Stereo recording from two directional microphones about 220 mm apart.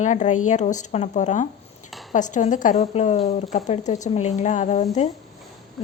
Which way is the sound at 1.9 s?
Centre (ahead or behind).